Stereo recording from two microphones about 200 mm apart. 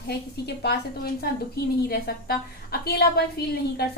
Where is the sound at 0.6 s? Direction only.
50° left (ahead or behind).